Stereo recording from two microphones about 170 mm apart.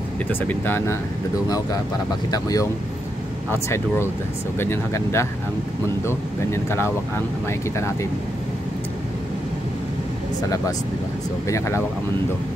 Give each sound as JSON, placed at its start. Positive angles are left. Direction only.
{"t": 0.3, "sound": "speech", "side_deg": 10}
{"t": 2.3, "sound": "speech", "side_deg": 20}
{"t": 11.4, "sound": "speech", "side_deg": 15}